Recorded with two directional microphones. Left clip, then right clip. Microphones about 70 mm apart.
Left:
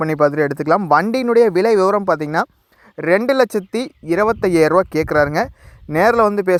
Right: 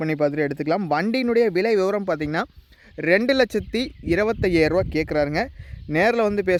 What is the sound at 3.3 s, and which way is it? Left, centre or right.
Speech, right.